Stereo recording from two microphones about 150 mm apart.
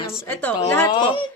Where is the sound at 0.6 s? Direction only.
15° left (ahead or behind).